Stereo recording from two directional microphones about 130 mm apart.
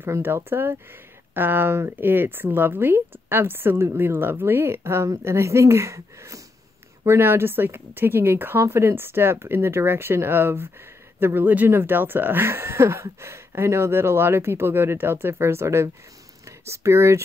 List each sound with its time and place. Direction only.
0.0 s speech: 15° right (ahead or behind)